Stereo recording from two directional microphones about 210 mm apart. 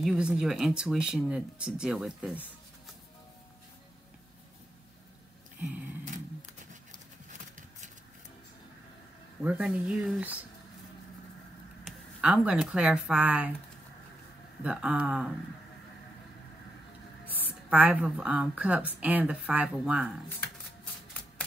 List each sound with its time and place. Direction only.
0.0 s speech: 5° right (ahead or behind)
7.2 s a sound: 35° right (ahead or behind)
9.4 s speech: 5° right (ahead or behind)
11.8 s speech: 5° right (ahead or behind)
14.6 s speech: 5° right (ahead or behind)
17.6 s speech: 5° right (ahead or behind)